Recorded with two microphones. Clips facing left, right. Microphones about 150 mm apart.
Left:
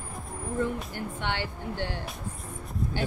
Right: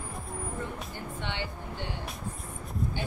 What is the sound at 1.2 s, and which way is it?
Speech, 80° left.